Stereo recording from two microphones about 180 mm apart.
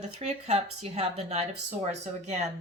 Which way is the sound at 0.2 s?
35° right (ahead or behind).